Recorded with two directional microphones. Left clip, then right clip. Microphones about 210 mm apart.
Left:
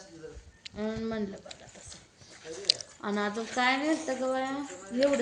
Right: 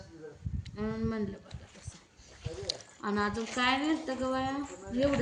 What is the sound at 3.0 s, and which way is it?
Speech, 15° right (ahead or behind).